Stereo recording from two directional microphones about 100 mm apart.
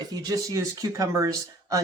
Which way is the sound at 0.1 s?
40° right (ahead or behind).